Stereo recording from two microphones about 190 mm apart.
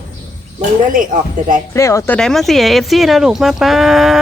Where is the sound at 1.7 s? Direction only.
15° left (ahead or behind).